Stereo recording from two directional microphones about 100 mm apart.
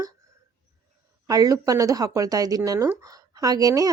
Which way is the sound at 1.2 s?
35° right (ahead or behind).